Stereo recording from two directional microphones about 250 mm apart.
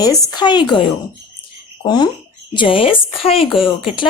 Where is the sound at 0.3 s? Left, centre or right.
Centre.